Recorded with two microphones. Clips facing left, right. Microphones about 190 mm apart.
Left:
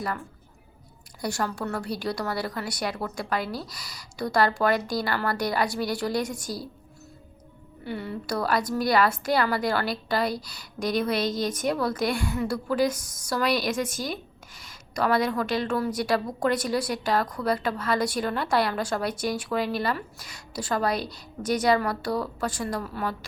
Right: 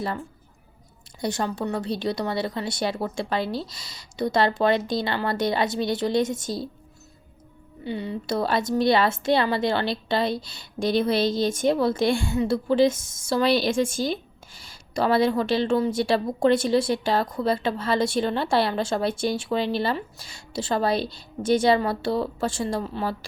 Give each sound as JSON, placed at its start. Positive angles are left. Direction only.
{"t": 1.2, "sound": "a woman's voice", "side_deg": -20}
{"t": 7.9, "sound": "a woman's voice", "side_deg": -20}